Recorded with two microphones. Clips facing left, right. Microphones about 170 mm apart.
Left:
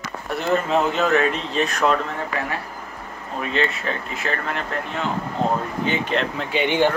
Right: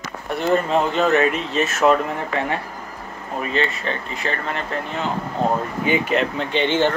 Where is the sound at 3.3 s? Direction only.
Centre (ahead or behind).